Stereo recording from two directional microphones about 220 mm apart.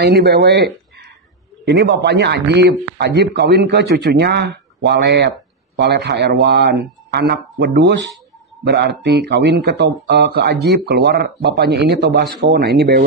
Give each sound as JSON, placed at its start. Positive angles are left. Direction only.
{"t": 0.0, "sound": "speech", "side_deg": -45}